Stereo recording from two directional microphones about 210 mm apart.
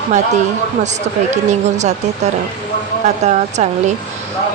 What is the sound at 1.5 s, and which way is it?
Speech, 35° right (ahead or behind).